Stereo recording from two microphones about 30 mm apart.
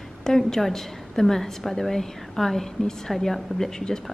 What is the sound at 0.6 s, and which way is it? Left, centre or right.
A woman's voice, centre.